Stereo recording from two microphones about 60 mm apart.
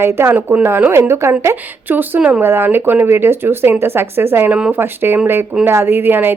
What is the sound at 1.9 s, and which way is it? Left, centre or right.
A woman's voice, right.